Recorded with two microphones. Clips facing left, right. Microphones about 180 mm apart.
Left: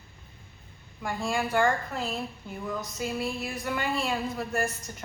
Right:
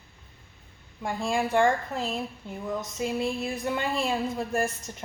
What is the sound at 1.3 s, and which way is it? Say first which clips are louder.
Speech: right 2 dB; 25° right (ahead or behind).